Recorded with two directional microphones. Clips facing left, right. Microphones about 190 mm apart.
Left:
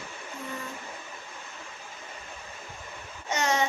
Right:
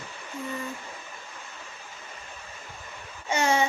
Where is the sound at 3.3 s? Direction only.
10° right (ahead or behind).